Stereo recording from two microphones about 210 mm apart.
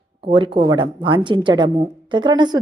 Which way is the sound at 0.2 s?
25° right (ahead or behind).